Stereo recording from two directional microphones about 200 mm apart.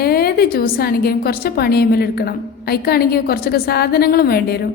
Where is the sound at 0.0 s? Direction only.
50° left (ahead or behind).